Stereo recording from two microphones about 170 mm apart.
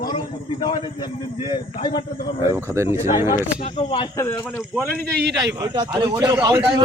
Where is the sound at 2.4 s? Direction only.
15° right (ahead or behind).